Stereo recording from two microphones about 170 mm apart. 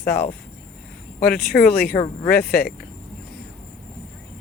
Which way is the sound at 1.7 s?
65° left (ahead or behind).